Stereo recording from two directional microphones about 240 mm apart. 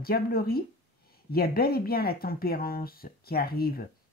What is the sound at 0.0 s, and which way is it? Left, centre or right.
Speech, left.